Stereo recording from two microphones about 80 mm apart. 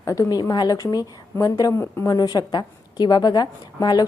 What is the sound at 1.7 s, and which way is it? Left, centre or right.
Speech, left.